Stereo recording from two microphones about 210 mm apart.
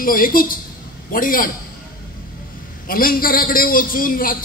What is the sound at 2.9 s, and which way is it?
A man's voice, 45° left (ahead or behind).